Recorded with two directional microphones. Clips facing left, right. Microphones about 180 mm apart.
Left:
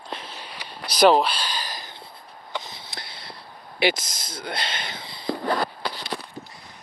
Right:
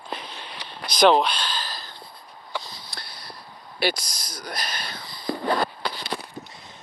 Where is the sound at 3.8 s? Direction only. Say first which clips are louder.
Left 3 dB; 20° left (ahead or behind).